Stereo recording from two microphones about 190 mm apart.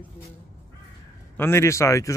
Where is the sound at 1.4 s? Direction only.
15° left (ahead or behind).